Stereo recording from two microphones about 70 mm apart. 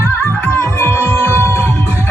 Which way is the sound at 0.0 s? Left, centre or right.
Left.